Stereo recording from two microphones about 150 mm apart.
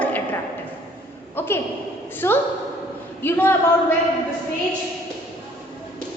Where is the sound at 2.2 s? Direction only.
15° left (ahead or behind).